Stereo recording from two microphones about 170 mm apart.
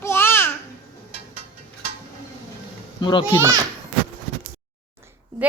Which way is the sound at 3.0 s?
25° left (ahead or behind).